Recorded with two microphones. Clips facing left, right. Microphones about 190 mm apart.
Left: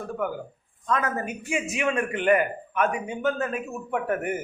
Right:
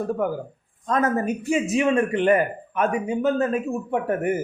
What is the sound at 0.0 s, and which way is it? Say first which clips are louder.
Speech: right 5 dB; 40° right (ahead or behind).